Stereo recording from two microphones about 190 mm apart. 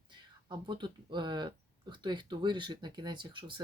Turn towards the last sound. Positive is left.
turn(degrees=-25)  # may be behind; listen again after turning